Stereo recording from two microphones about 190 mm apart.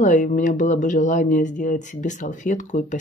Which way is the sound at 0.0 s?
40° left (ahead or behind).